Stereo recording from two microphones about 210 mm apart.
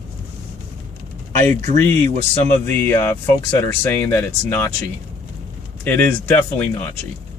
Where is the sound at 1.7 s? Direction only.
10° left (ahead or behind).